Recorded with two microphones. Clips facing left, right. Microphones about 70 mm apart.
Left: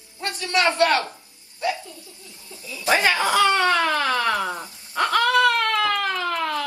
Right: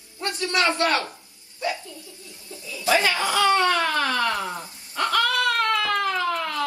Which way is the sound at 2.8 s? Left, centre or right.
Left.